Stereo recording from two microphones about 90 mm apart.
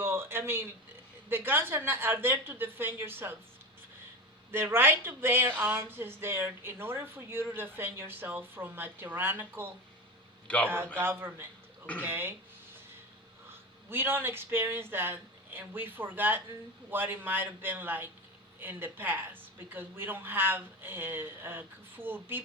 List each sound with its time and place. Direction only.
0.0 s a sound: 30° right (ahead or behind)
1.3 s speech: 25° right (ahead or behind)
4.5 s speech: 25° right (ahead or behind)
10.9 s a man's voice: 25° right (ahead or behind)
13.9 s speech: 25° right (ahead or behind)